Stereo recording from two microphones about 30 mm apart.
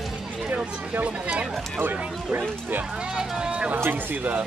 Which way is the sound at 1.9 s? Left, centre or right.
Right.